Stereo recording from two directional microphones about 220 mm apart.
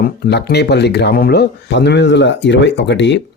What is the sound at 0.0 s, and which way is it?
Speech, 50° left (ahead or behind).